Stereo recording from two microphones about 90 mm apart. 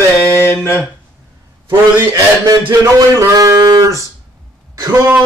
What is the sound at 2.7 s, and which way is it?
Speech, 30° right (ahead or behind).